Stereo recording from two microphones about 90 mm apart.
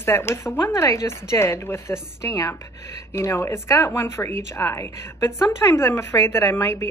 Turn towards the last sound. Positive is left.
turn(degrees=35)  # may be behind; listen again after turning